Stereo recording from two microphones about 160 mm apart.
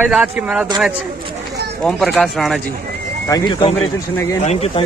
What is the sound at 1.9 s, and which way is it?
Speech, centre (ahead or behind).